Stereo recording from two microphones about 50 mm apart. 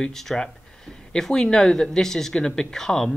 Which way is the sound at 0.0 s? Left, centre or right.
Centre.